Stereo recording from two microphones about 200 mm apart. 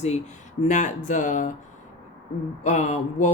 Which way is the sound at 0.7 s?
40° left (ahead or behind).